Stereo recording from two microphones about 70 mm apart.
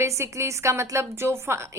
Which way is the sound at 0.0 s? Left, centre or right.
Right.